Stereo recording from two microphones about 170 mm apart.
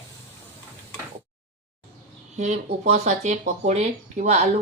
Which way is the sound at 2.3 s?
45° right (ahead or behind).